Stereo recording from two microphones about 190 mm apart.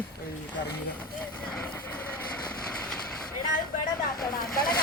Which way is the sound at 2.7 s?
5° left (ahead or behind).